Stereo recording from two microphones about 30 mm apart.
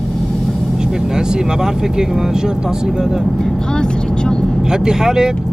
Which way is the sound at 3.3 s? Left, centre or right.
Left.